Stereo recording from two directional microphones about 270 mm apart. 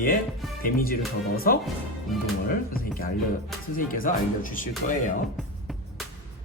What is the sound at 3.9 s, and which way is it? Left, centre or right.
Speech, left.